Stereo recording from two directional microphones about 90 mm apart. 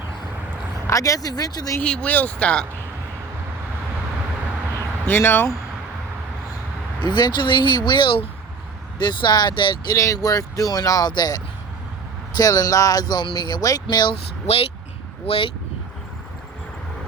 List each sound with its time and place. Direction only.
0.9 s speech: 35° left (ahead or behind)
1.8 s speech: 15° left (ahead or behind)
5.0 s speech: 25° left (ahead or behind)
7.0 s speech: 55° left (ahead or behind)
9.0 s speech: 55° left (ahead or behind)
9.8 s speech: 40° left (ahead or behind)
13.9 s speech: 55° left (ahead or behind)
15.3 s speech: 80° left